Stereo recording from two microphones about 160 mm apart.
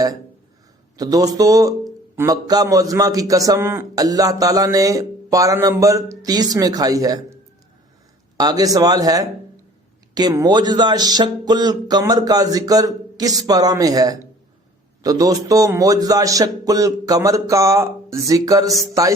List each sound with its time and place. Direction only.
0.9 s speech: 25° right (ahead or behind)
8.4 s speech: 25° right (ahead or behind)